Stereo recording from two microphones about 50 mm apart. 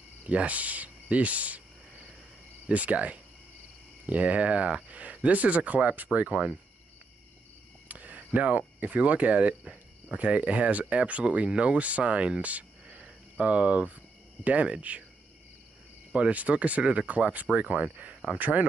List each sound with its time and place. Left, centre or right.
0.3 s speech: right
2.6 s speech: right
7.9 s speech: right
16.1 s speech: right